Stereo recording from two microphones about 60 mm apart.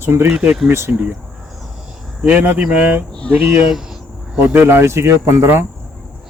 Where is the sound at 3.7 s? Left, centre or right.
Centre.